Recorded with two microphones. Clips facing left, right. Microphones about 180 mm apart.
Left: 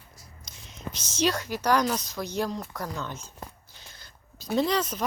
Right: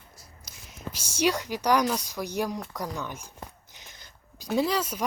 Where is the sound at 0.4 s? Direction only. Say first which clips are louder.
Left 1 dB; 5° right (ahead or behind).